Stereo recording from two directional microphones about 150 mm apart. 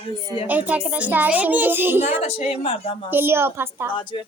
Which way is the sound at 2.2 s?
40° left (ahead or behind).